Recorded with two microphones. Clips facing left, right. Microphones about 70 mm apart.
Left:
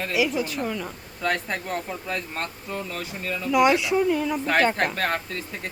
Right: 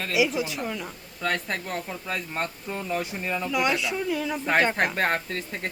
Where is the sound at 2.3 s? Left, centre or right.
Centre.